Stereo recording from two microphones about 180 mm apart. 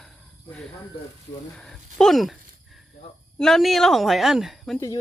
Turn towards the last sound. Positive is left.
turn(degrees=0)  # may be behind; listen again after turning